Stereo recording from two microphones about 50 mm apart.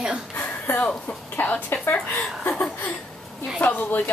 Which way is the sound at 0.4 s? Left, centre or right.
Left.